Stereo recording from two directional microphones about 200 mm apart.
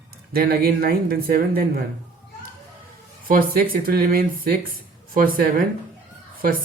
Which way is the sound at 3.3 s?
45° right (ahead or behind).